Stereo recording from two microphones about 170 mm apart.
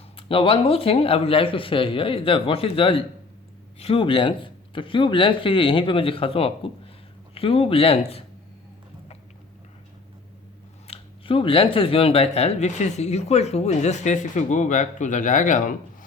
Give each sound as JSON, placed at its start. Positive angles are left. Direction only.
{"t": 0.2, "sound": "speech", "side_deg": 30}
{"t": 10.8, "sound": "speech", "side_deg": 35}